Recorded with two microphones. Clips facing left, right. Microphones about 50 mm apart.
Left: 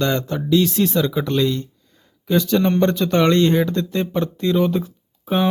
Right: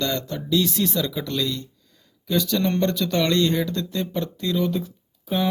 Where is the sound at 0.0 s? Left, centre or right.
Left.